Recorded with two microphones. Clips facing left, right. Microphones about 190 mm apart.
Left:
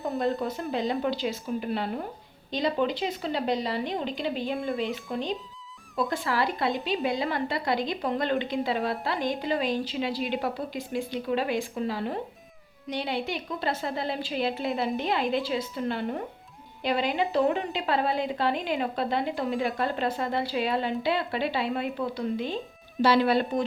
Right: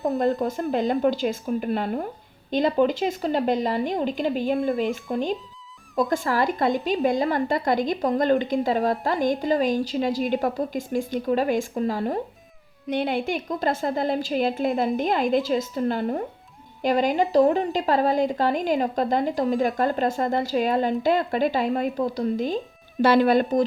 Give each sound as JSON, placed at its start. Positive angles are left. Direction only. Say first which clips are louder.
{"t": 0.2, "sound": "a woman's voice", "louder": "right 5 dB", "side_deg": -45}